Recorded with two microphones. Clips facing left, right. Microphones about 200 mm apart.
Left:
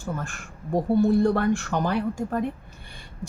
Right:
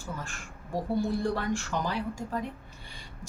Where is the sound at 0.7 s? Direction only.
55° left (ahead or behind).